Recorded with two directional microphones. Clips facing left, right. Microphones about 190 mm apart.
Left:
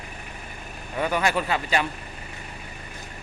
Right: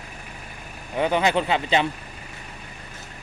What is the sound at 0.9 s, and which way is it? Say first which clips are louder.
Speech: right 3 dB; 20° right (ahead or behind).